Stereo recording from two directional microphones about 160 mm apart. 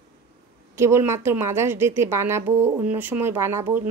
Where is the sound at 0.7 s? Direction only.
15° right (ahead or behind).